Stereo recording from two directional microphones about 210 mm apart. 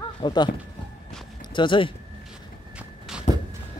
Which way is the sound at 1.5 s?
25° left (ahead or behind).